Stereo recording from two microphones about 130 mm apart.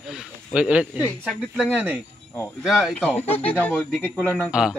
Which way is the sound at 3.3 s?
50° left (ahead or behind).